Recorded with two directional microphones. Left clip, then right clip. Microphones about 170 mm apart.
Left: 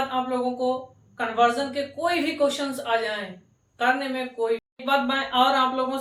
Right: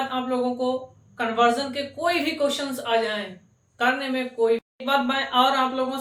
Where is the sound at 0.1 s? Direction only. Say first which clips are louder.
Even; 20° right (ahead or behind).